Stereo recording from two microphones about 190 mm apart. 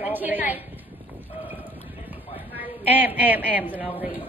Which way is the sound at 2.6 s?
10° right (ahead or behind).